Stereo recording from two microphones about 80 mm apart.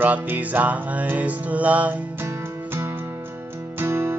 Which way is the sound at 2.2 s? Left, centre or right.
Right.